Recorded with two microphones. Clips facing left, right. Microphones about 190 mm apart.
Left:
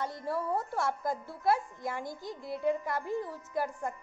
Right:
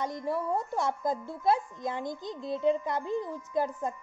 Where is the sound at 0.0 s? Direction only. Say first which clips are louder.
Right 3 dB; 15° right (ahead or behind).